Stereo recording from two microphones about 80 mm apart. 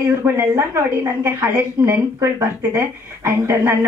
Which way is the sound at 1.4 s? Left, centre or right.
Right.